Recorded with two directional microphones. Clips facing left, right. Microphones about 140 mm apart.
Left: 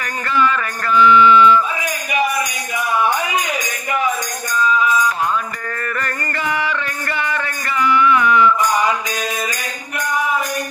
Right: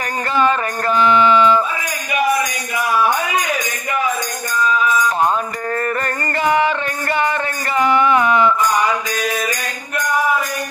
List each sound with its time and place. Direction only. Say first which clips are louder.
0.3 s a sound: right 1 dB; 30° right (ahead or behind)
5.0 s mantra: right 3 dB; 35° right (ahead or behind)
5.8 s music: right 3 dB; 35° right (ahead or behind)